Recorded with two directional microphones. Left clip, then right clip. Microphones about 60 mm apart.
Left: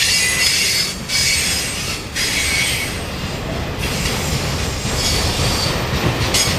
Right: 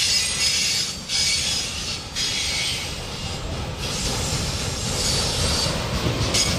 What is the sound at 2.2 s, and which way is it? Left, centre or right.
Mechanisms, left.